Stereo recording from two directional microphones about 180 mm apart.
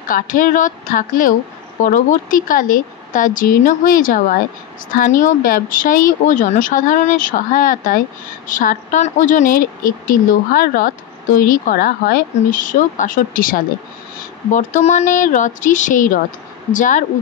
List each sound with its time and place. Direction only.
0.1 s speech: 50° left (ahead or behind)
5.2 s speech: 50° left (ahead or behind)